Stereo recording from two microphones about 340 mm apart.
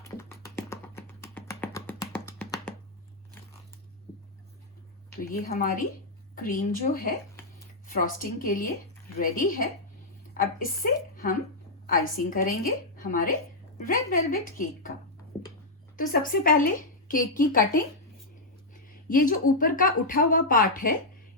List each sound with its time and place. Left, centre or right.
0.2 s music: centre
5.3 s a woman's voice: left
11.9 s a woman's voice: left
16.0 s a woman's voice: left
18.7 s a woman's voice: left